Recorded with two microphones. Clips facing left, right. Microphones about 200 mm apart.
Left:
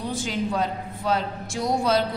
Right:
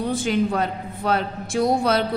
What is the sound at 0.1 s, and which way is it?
A woman's voice, 60° right (ahead or behind).